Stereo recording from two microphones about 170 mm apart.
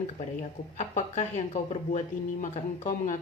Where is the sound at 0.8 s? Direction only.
40° left (ahead or behind).